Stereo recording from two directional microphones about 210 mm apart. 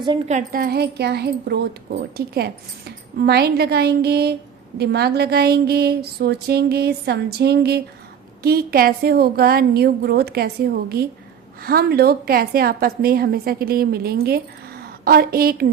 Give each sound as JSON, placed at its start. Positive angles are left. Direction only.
{"t": 0.3, "sound": "speech", "side_deg": -40}